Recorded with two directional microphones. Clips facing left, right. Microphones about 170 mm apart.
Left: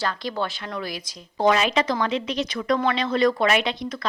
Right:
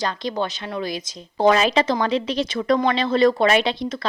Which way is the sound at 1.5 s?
35° right (ahead or behind).